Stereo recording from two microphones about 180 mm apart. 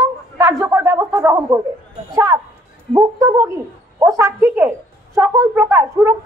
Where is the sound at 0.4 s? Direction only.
15° right (ahead or behind).